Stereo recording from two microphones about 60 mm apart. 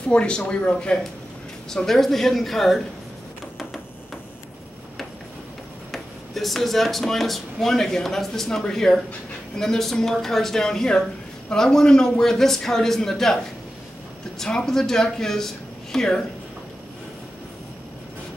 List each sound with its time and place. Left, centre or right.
0.1 s a man's voice: centre
5.9 s a man's voice: centre
14.4 s a man's voice: centre